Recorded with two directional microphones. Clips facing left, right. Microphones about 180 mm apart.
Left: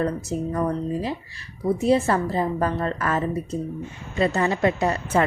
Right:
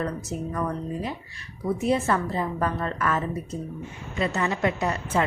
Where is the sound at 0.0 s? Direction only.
35° left (ahead or behind).